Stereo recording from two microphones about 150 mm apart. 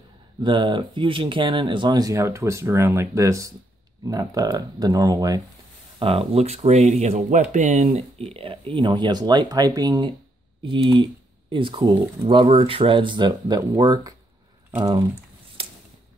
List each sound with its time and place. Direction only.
0.4 s speech: 30° right (ahead or behind)
5.9 s speech: 40° right (ahead or behind)
15.6 s a sound: 40° right (ahead or behind)